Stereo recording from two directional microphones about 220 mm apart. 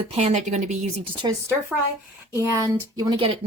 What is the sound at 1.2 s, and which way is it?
A woman's voice, 15° right (ahead or behind).